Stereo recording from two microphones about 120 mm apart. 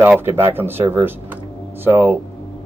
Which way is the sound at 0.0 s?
15° right (ahead or behind).